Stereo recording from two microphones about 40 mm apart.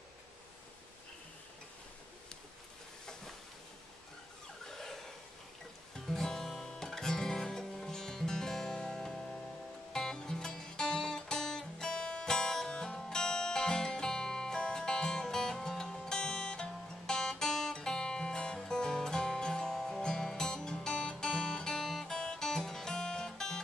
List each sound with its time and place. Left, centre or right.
4.6 s a sound: centre
5.9 s music: centre
20.9 s music: left
21.2 s music: centre